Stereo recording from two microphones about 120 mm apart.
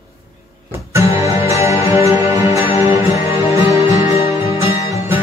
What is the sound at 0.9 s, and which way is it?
Music, 25° right (ahead or behind).